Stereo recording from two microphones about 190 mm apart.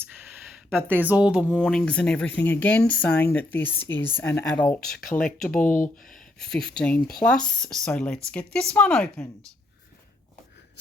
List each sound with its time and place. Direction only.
0.5 s a sound: centre (ahead or behind)
0.9 s speech: 10° right (ahead or behind)
4.9 s speech: 45° left (ahead or behind)
6.4 s speech: 5° left (ahead or behind)